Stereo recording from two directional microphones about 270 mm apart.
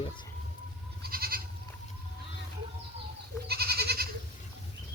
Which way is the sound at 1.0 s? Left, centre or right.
Right.